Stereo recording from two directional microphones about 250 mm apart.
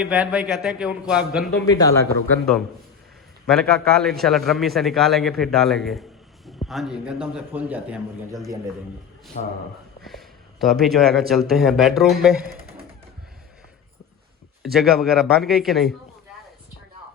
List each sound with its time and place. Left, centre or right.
0.0 s a man's voice: centre
1.6 s speech: centre
3.4 s a man's voice: centre
9.3 s speech: left
10.0 s speech: centre
14.6 s a man's voice: centre